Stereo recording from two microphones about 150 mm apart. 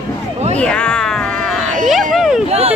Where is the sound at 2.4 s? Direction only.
45° right (ahead or behind).